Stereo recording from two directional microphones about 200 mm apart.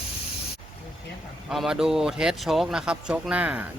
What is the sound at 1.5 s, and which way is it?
Speech, centre (ahead or behind).